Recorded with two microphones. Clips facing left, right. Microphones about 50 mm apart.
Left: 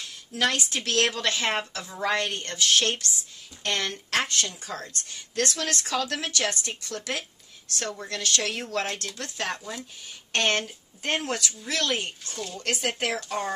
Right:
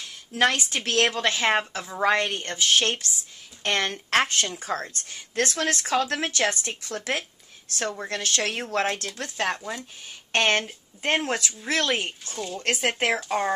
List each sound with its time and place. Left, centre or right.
0.3 s a woman's voice: right
9.4 s speech: centre
10.3 s a woman's voice: right